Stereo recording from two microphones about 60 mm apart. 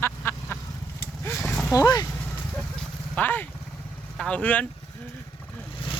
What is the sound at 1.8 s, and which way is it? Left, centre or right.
Speech, left.